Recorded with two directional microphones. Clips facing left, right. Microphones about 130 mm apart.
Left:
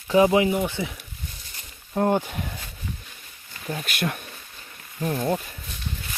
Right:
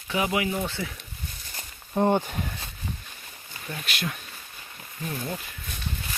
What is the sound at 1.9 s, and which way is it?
Speech, 5° left (ahead or behind).